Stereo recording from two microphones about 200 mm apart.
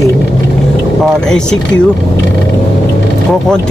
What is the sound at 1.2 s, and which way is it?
Speech, 5° left (ahead or behind).